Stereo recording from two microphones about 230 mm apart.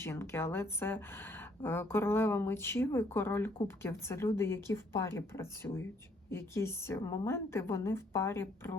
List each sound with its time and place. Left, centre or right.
0.0 s a woman's voice: centre